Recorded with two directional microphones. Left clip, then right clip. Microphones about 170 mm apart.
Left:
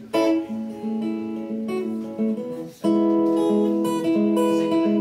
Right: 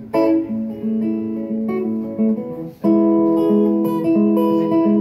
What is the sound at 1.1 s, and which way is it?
Music, 40° left (ahead or behind).